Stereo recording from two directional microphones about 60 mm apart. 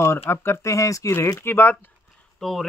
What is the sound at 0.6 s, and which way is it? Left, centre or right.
Speech, left.